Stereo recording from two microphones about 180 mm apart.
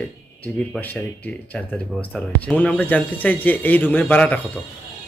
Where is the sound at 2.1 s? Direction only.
5° left (ahead or behind).